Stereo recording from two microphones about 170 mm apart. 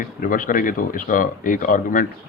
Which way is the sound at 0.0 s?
55° left (ahead or behind).